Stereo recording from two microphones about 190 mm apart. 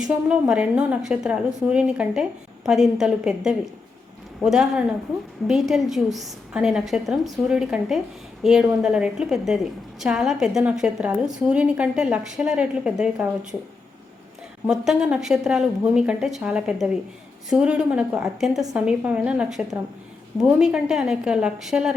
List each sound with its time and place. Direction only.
0.0 s a woman's voice: 5° right (ahead or behind)
14.7 s a woman's voice: centre (ahead or behind)